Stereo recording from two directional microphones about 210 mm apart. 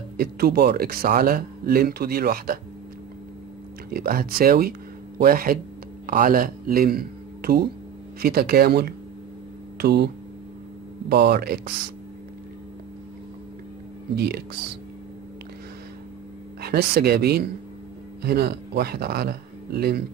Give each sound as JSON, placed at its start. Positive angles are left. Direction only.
{"t": 0.2, "sound": "speech", "side_deg": -45}
{"t": 3.9, "sound": "speech", "side_deg": -45}
{"t": 14.1, "sound": "speech", "side_deg": -50}
{"t": 16.6, "sound": "speech", "side_deg": -50}